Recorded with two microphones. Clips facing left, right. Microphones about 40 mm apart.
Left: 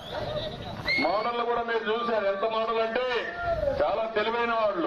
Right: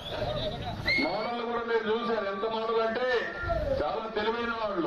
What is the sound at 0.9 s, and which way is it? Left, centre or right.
A man's voice, left.